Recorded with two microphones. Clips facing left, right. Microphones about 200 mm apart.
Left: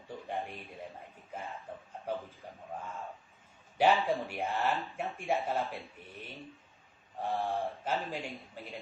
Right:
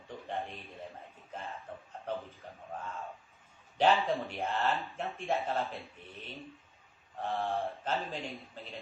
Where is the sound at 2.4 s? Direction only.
10° left (ahead or behind).